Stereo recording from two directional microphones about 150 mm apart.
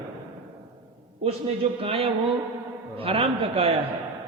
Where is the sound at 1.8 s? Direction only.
40° right (ahead or behind).